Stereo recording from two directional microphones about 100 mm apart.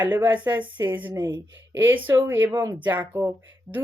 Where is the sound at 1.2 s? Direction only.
45° right (ahead or behind).